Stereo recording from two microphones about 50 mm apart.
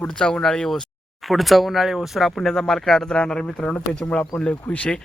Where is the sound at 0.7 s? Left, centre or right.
Centre.